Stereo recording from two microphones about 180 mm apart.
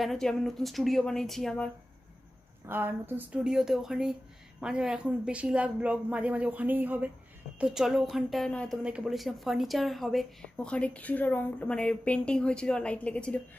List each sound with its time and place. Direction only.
0.0 s a woman's voice: centre (ahead or behind)
2.7 s a woman's voice: 10° right (ahead or behind); by 13.4 s 5° left (ahead or behind)